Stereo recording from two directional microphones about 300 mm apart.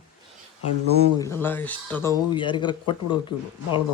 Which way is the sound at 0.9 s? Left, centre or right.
Centre.